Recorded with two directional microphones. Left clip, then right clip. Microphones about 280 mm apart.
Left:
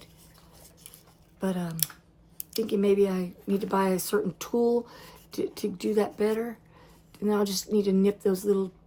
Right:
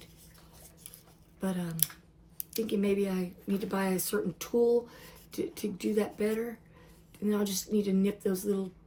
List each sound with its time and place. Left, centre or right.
1.4 s speech: centre